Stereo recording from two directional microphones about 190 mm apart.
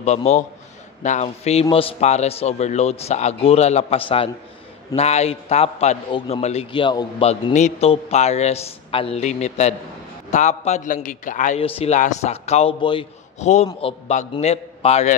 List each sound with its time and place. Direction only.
0.0 s a man's voice: 35° left (ahead or behind)